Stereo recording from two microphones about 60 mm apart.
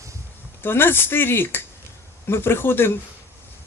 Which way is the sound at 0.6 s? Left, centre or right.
Left.